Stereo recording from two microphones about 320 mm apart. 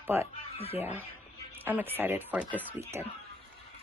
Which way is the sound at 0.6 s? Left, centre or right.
Centre.